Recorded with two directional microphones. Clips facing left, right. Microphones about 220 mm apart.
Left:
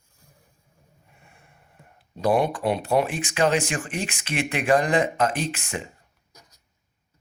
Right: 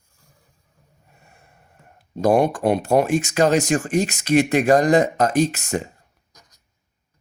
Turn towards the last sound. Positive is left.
turn(degrees=10)  # may be behind; listen again after turning